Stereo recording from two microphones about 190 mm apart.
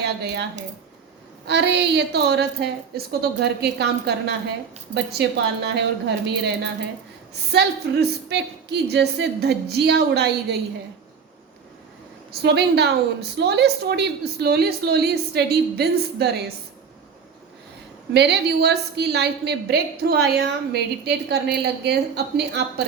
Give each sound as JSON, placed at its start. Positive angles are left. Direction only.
{"t": 0.0, "sound": "speech", "side_deg": -60}
{"t": 1.5, "sound": "a woman's voice", "side_deg": -65}
{"t": 12.3, "sound": "a woman's voice", "side_deg": -60}
{"t": 18.1, "sound": "a woman's voice", "side_deg": -60}